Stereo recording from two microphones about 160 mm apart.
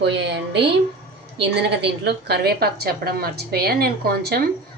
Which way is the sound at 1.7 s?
90° right.